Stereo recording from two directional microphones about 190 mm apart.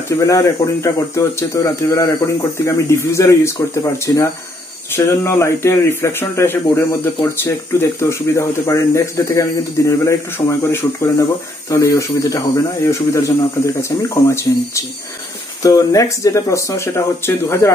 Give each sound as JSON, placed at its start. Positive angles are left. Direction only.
{"t": 0.1, "sound": "speech", "side_deg": 15}
{"t": 15.6, "sound": "speech", "side_deg": 20}